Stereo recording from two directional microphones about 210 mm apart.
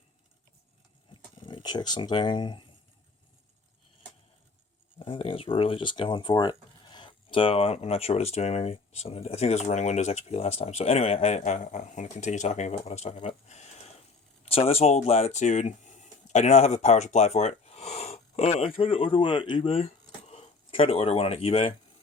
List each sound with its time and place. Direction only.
1.1 s speech: 25° left (ahead or behind)
4.9 s speech: 25° left (ahead or behind)